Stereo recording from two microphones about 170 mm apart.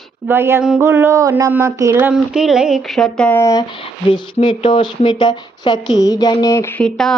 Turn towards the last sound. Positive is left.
turn(degrees=5)  # may be behind; listen again after turning